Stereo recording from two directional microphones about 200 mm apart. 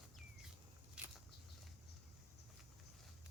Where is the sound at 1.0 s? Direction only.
5° right (ahead or behind).